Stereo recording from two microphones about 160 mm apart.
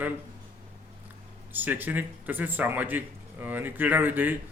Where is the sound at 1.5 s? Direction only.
10° right (ahead or behind).